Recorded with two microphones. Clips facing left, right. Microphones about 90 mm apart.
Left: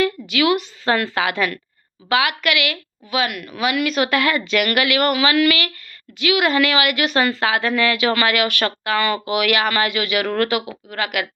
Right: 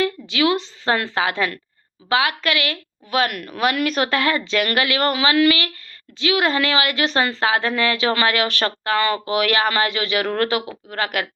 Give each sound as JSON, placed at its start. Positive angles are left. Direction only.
{"t": 0.0, "sound": "a woman's voice", "side_deg": -25}
{"t": 3.1, "sound": "a woman's voice", "side_deg": -45}